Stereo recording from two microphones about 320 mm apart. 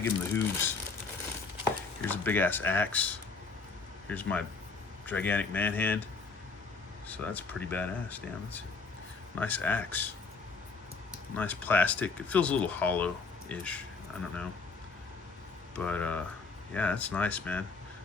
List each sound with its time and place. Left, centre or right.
0.0 s speech: centre
2.0 s speech: centre
7.1 s speech: centre
11.3 s speech: centre
15.8 s speech: centre